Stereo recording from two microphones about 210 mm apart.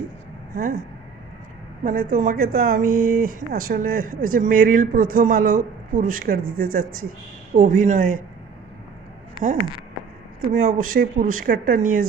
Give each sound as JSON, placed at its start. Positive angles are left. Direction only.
{"t": 0.5, "sound": "speech", "side_deg": -45}
{"t": 1.8, "sound": "speech", "side_deg": -40}
{"t": 10.5, "sound": "speech", "side_deg": -40}